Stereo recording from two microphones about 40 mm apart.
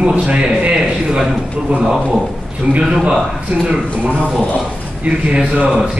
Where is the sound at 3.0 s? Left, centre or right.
Right.